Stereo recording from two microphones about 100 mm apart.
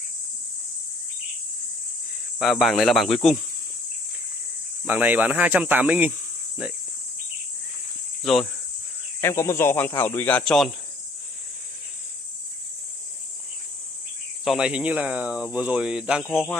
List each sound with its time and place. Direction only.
2.3 s speech: centre (ahead or behind)
4.8 s speech: 15° right (ahead or behind)
8.2 s speech: centre (ahead or behind)
9.2 s speech: 30° left (ahead or behind)
10.4 s speech: 5° left (ahead or behind)
14.4 s speech: centre (ahead or behind)
14.7 s speech: 15° right (ahead or behind)
16.3 s speech: 5° left (ahead or behind)